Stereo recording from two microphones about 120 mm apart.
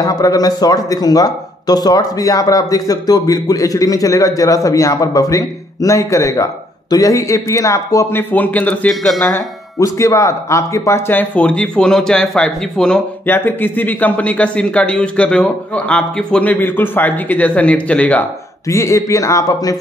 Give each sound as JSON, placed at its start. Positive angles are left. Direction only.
{"t": 0.0, "sound": "a man's voice", "side_deg": 30}
{"t": 9.2, "sound": "a man's voice", "side_deg": 25}
{"t": 13.3, "sound": "a man's voice", "side_deg": 15}
{"t": 18.7, "sound": "a man's voice", "side_deg": 25}